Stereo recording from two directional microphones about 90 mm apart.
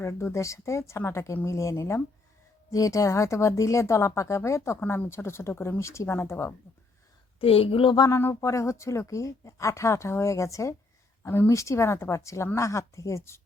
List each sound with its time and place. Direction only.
0.0 s a woman's voice: 30° left (ahead or behind)
7.3 s speech: 90° left
8.1 s a woman's voice: 30° left (ahead or behind)